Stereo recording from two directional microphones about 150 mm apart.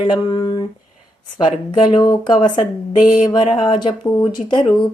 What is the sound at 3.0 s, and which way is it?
Mantra, 55° left (ahead or behind).